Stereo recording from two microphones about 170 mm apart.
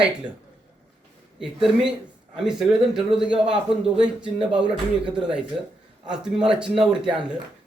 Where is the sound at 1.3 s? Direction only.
5° right (ahead or behind).